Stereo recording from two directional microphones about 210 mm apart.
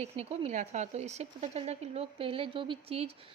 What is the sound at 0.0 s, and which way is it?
Speech, 30° right (ahead or behind).